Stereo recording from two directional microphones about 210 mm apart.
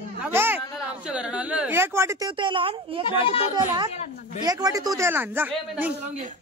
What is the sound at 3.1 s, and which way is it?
Speech, 25° left (ahead or behind).